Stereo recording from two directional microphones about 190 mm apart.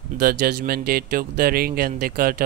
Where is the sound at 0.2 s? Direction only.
55° right (ahead or behind).